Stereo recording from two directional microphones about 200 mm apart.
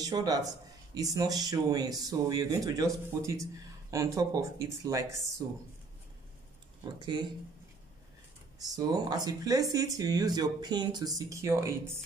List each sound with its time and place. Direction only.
0.0 s speech: 20° right (ahead or behind)
6.8 s speech: 20° right (ahead or behind)
8.5 s speech: 20° right (ahead or behind)